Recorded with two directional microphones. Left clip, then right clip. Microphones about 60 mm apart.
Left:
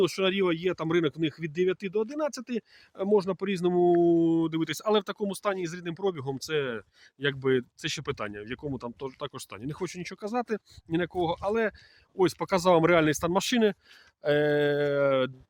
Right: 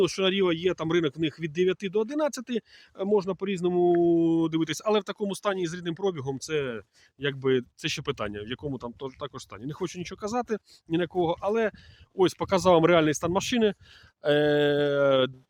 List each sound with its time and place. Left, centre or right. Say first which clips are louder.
0.0 s speech: right 1 dB; right
1.4 s mantra: right 3 dB; right
2.4 s speech: right 2 dB; right
3.1 s speech: even; centre
4.1 s speech: right 1 dB; centre
4.8 s speech: left 2 dB; centre
5.3 s speech: right 3 dB; right
6.3 s speech: even; centre
7.8 s mantra: right 2 dB; right
8.6 s speech: right 1 dB; centre
10.2 s speech: right 1 dB; centre
13.1 s speech: even; centre
14.2 s mantra: right 2 dB; right